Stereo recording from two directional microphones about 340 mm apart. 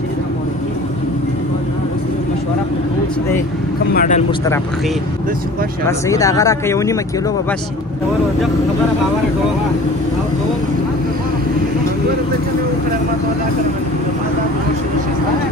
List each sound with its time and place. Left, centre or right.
3.9 s speech: left
5.9 s speech: centre